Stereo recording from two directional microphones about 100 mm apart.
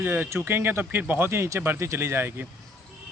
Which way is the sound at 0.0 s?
20° right (ahead or behind).